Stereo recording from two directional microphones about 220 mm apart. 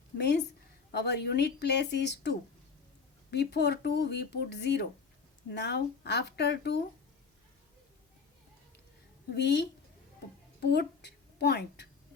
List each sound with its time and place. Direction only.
0.2 s speech: 50° left (ahead or behind)
3.3 s speech: 50° left (ahead or behind)
9.3 s a woman's voice: 50° left (ahead or behind)